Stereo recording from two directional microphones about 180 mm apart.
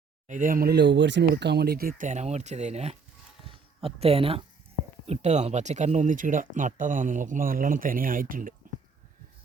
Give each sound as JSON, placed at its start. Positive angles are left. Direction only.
{"t": 0.3, "sound": "speech", "side_deg": -45}